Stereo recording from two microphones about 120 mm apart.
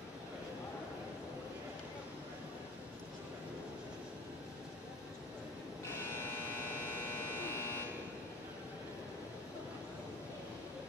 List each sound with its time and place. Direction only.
7.0 s electric shaver: 20° left (ahead or behind)